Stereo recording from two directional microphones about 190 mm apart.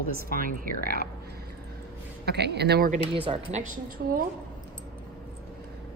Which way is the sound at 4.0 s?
55° right (ahead or behind).